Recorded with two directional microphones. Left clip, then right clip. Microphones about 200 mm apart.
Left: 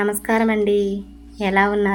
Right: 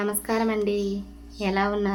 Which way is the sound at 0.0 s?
15° left (ahead or behind).